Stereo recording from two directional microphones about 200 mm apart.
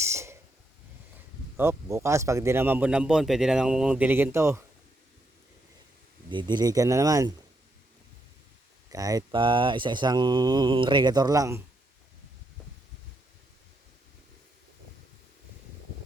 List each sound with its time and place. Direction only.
0.0 s snort: 15° right (ahead or behind)
1.5 s a man's voice: 15° right (ahead or behind)
6.3 s a man's voice: 20° right (ahead or behind)
8.9 s mantra: 15° right (ahead or behind)